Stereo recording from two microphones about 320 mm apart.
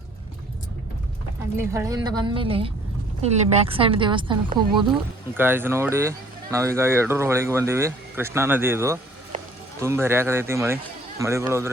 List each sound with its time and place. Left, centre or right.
1.5 s speech: centre